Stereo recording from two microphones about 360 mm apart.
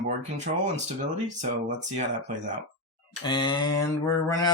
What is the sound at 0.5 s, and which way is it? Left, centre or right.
Speech, right.